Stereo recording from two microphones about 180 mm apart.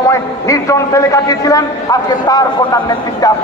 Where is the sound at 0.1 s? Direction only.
15° left (ahead or behind).